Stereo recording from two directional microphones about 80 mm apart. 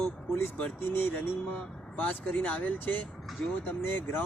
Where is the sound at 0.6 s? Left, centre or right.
Centre.